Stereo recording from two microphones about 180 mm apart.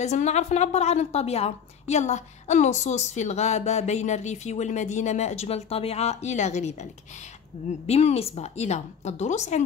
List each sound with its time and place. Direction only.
0.0 s a woman's voice: 40° left (ahead or behind)